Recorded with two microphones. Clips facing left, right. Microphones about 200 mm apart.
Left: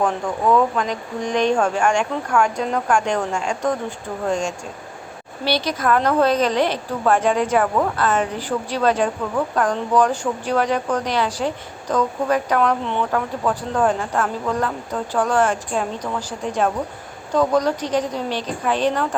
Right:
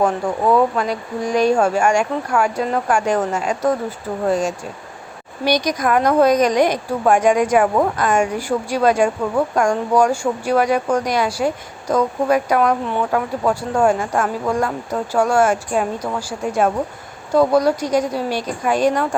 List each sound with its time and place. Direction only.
0.0 s speech: 5° right (ahead or behind)